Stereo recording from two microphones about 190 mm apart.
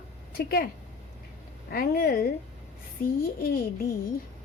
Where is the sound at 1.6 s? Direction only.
50° left (ahead or behind).